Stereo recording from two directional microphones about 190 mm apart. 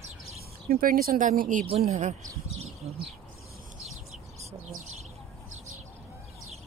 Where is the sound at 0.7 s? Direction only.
50° right (ahead or behind).